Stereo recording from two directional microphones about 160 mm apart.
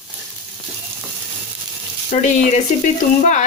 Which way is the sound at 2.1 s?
50° left (ahead or behind).